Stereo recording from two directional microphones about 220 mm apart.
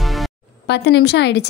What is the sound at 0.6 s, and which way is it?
Speech, 50° left (ahead or behind).